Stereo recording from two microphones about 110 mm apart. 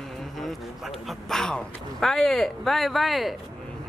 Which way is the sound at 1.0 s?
5° left (ahead or behind).